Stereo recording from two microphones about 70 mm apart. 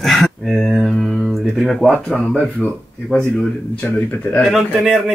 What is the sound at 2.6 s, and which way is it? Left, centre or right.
Speech, centre.